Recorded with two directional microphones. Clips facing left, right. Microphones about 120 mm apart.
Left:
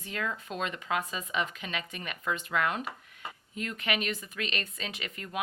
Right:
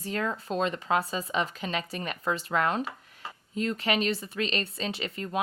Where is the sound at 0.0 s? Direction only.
35° right (ahead or behind).